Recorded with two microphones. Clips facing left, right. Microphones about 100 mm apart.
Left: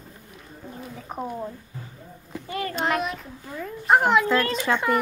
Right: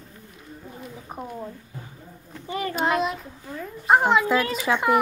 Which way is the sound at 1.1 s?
20° left (ahead or behind).